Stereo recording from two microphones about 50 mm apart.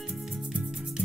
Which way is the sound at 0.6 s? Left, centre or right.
Centre.